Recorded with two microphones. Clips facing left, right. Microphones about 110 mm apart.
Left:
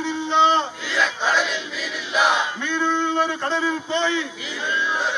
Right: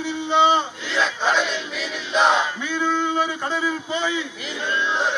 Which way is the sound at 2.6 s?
10° right (ahead or behind).